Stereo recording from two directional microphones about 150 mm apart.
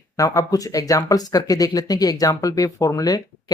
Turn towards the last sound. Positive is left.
turn(degrees=25)  # may be behind; listen again after turning